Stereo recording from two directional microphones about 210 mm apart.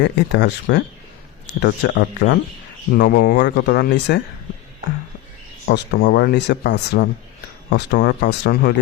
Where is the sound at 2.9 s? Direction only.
40° left (ahead or behind).